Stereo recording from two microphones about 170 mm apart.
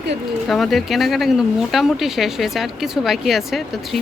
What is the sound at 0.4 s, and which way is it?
Speech, centre (ahead or behind).